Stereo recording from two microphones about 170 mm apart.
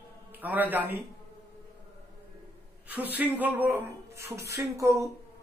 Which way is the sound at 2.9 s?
10° right (ahead or behind).